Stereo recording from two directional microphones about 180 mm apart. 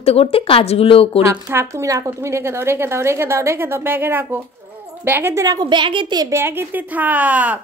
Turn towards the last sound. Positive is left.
turn(degrees=-10)  # may be behind; listen again after turning